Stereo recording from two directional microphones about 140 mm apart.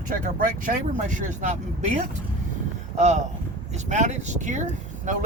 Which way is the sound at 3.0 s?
55° right (ahead or behind).